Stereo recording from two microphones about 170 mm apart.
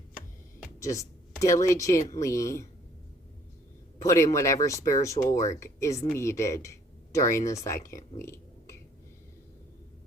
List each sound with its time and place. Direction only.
0.8 s speech: 20° left (ahead or behind)
3.9 s speech: 15° left (ahead or behind)
8.2 s a sound: 15° left (ahead or behind)